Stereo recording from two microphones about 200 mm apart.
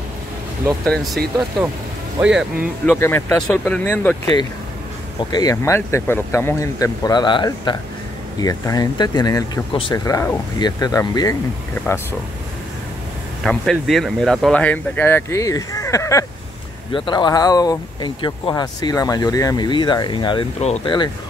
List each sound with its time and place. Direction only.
0.8 s speech: centre (ahead or behind)
2.9 s speech: 10° left (ahead or behind)
5.3 s speech: 20° left (ahead or behind)
13.4 s speech: centre (ahead or behind); by 21.1 s 25° left (ahead or behind)